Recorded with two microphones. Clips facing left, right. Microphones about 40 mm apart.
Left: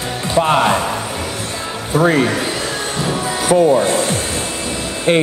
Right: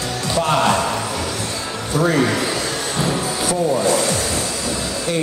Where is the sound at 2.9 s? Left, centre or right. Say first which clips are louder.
Left 1 dB; left.